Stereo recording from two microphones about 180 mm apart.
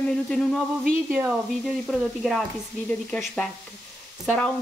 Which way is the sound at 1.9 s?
Centre (ahead or behind).